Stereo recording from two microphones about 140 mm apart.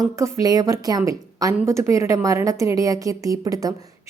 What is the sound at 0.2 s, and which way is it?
A woman's voice, 20° right (ahead or behind).